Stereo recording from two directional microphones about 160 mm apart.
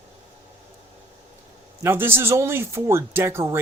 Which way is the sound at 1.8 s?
15° right (ahead or behind).